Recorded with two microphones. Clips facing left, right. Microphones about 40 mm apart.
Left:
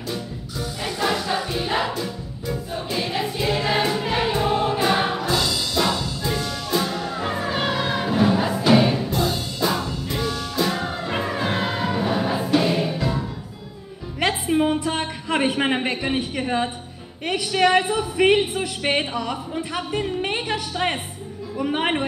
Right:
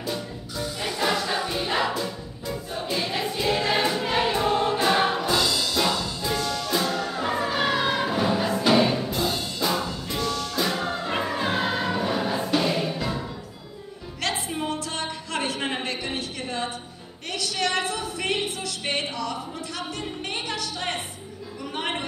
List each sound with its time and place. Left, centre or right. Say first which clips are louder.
0.1 s music: left 3 dB; centre
14.2 s a sound: left 8 dB; left
17.3 s a woman's voice: left 8 dB; left